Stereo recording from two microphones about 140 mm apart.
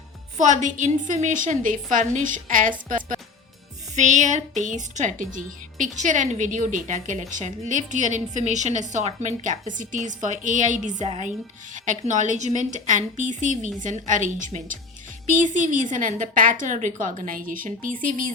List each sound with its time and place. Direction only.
0.3 s a woman's voice: 60° right (ahead or behind)
3.9 s a woman's voice: 55° right (ahead or behind); by 17.9 s 80° right